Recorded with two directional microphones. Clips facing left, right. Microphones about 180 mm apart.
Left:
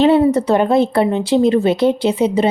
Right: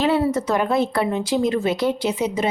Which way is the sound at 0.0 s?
25° left (ahead or behind).